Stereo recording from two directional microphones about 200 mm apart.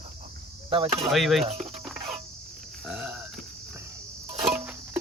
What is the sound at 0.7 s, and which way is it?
Cricket, 25° right (ahead or behind).